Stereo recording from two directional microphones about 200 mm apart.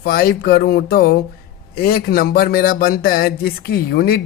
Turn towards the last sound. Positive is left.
turn(degrees=50)  # may be behind; listen again after turning